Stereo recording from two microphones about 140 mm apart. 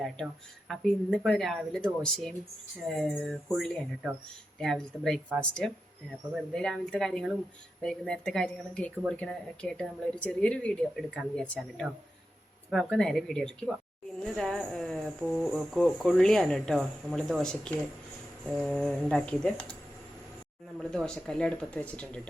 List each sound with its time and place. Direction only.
0.7 s speech: 5° left (ahead or behind)
20.7 s speech: 5° left (ahead or behind)